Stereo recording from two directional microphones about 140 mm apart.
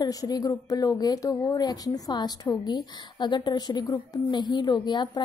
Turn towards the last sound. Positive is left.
turn(degrees=30)  # may be behind; listen again after turning